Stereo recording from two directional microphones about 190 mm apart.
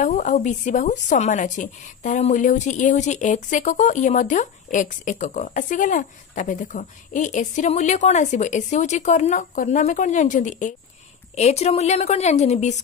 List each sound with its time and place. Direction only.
0.0 s a woman's voice: 45° left (ahead or behind)